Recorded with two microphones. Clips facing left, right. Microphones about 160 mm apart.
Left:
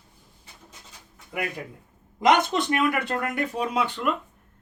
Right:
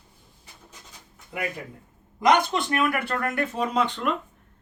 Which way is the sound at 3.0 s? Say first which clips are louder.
Even; 15° left (ahead or behind).